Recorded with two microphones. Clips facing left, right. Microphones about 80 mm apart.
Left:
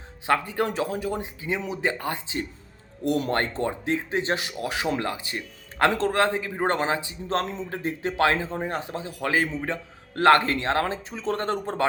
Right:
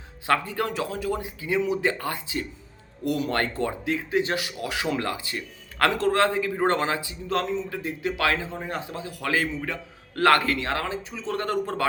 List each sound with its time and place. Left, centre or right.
0.3 s a man's voice: left